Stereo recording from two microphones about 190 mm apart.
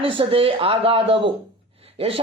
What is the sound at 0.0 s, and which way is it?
Speech, 25° right (ahead or behind).